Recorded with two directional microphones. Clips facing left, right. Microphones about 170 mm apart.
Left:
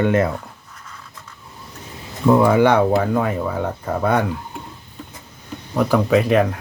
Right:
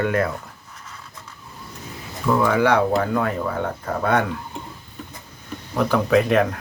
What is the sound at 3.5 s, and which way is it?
Speech, 10° left (ahead or behind).